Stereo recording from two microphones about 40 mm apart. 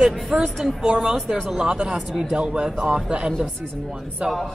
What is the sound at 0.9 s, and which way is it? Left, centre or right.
Speech, centre.